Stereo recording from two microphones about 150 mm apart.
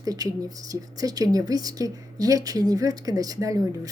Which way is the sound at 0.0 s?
25° right (ahead or behind).